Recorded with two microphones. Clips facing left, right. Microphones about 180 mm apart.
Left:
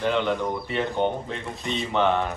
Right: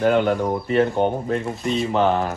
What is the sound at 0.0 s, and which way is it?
Speech, 45° right (ahead or behind).